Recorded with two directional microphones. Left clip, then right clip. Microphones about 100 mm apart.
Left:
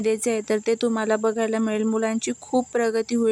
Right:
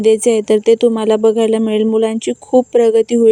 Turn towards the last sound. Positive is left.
turn(degrees=-25)  # may be behind; listen again after turning